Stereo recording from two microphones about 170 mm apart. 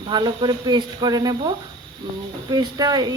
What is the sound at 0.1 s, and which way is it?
Speech, 25° right (ahead or behind).